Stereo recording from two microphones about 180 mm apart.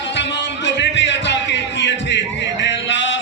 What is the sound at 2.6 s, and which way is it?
Music, 90° left.